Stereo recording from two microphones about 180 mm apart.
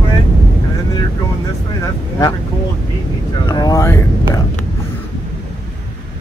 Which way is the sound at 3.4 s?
20° left (ahead or behind).